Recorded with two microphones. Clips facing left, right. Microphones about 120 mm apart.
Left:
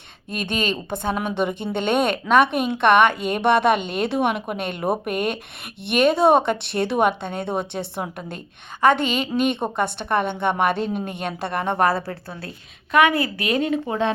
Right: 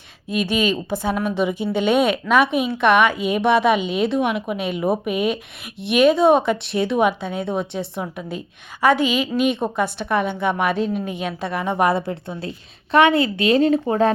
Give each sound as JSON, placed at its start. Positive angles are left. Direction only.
{"t": 0.3, "sound": "a woman's voice", "side_deg": -5}
{"t": 11.9, "sound": "speech", "side_deg": -20}